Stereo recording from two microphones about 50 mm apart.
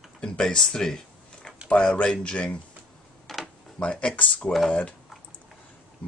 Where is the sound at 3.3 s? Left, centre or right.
Centre.